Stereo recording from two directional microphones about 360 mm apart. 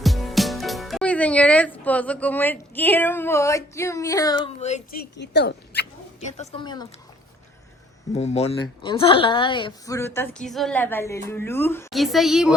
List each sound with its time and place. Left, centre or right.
0.0 s a woman's voice: centre
8.1 s a woman's voice: centre